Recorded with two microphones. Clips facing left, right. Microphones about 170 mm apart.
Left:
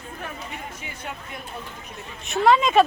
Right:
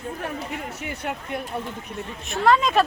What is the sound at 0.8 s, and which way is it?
Speech, 65° right (ahead or behind).